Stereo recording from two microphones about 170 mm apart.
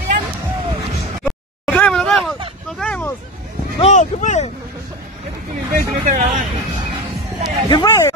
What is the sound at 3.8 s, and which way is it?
Speech, 45° left (ahead or behind).